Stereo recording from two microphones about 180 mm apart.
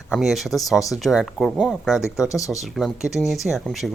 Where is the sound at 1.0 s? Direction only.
Centre (ahead or behind).